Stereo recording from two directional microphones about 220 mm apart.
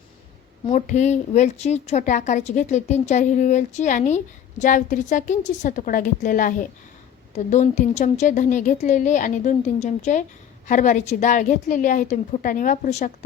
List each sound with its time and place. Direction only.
0.7 s a woman's voice: 35° left (ahead or behind)